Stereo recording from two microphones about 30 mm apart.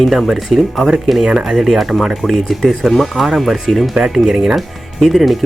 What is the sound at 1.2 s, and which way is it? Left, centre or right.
Speech, right.